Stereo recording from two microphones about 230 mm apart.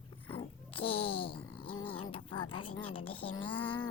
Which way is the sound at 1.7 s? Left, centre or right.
Left.